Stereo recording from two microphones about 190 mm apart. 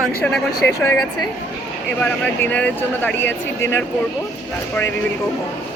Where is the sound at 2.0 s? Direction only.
10° left (ahead or behind).